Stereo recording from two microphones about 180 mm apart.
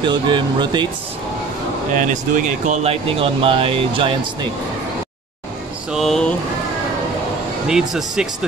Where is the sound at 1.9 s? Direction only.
45° right (ahead or behind); by 4.1 s 30° right (ahead or behind).